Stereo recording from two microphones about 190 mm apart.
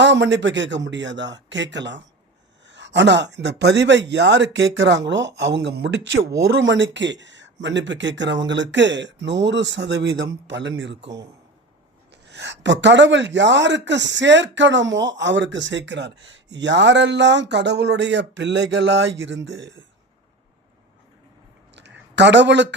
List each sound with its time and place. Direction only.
0.0 s a man's voice: 70° right (ahead or behind)
12.1 s a man's voice: 65° right (ahead or behind)
21.8 s a sound: 65° right (ahead or behind)